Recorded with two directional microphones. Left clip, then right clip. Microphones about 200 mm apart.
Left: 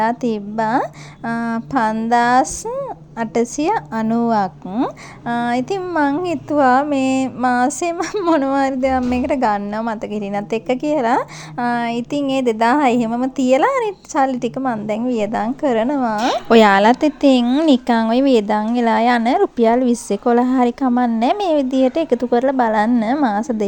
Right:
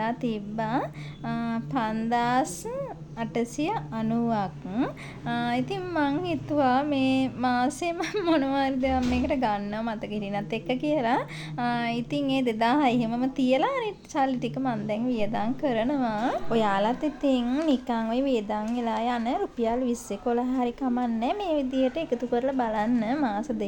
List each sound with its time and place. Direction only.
0.0 s speech: 35° left (ahead or behind)
16.5 s speech: 50° left (ahead or behind)